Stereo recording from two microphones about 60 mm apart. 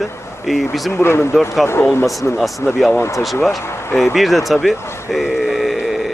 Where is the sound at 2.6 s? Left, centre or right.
Left.